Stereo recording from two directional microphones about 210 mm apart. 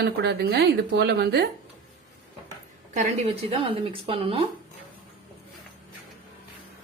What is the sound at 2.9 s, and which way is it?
Speech, 35° right (ahead or behind).